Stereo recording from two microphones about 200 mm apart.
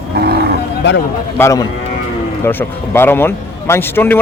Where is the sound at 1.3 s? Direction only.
15° left (ahead or behind).